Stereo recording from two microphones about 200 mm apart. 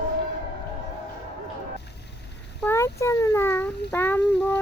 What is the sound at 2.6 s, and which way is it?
A child's voice, 15° left (ahead or behind).